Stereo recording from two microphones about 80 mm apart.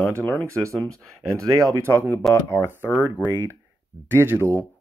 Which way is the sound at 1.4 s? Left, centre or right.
Right.